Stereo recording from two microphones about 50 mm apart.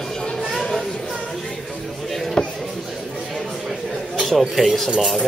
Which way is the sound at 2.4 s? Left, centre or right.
Centre.